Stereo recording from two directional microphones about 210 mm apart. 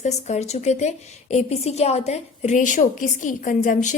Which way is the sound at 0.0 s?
30° left (ahead or behind).